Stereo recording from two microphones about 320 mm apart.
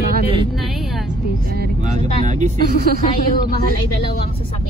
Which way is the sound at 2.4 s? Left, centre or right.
Right.